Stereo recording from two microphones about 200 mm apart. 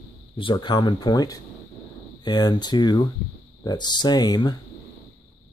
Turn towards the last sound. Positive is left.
turn(degrees=20)  # may be behind; listen again after turning